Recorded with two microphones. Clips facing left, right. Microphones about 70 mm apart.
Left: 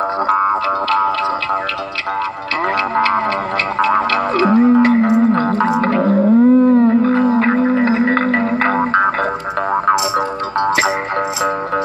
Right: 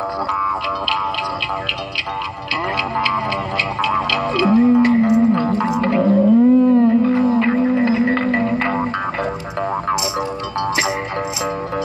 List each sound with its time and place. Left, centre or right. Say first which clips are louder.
0.8 s music: left 6 dB; left
3.8 s music: left 5 dB; left